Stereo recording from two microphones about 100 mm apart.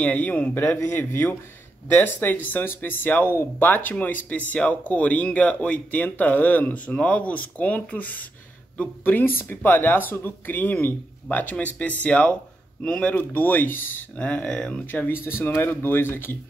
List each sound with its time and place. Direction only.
0.0 s speech: 15° left (ahead or behind)
14.9 s speech: 20° left (ahead or behind)